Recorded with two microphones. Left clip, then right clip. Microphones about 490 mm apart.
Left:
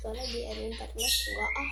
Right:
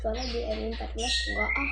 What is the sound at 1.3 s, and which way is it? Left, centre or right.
Speech, left.